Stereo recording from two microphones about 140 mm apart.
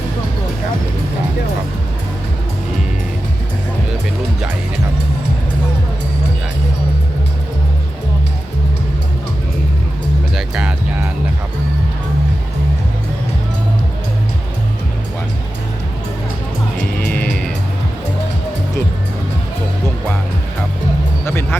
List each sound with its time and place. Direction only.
10.3 s music: 5° right (ahead or behind)
17.0 s music: 10° left (ahead or behind)
21.2 s music: 20° left (ahead or behind)